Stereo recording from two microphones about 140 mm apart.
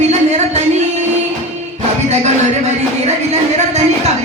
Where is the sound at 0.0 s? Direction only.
50° right (ahead or behind).